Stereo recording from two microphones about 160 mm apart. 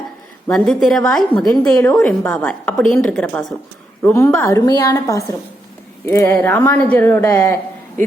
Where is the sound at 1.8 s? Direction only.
15° left (ahead or behind).